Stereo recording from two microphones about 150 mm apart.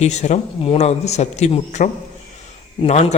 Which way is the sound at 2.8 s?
30° left (ahead or behind).